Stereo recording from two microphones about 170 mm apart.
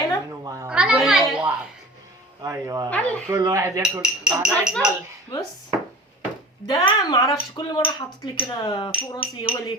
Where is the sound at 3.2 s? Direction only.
20° right (ahead or behind).